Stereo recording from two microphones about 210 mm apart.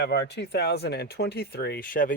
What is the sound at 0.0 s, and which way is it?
Speech, 50° left (ahead or behind).